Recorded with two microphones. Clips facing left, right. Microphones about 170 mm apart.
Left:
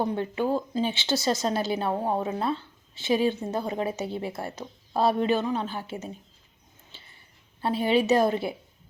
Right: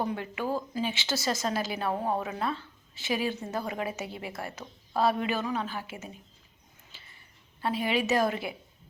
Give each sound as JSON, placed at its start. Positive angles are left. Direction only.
{"t": 0.0, "sound": "speech", "side_deg": 30}
{"t": 7.6, "sound": "speech", "side_deg": 30}